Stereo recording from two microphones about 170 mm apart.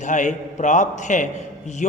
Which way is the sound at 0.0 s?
45° left (ahead or behind).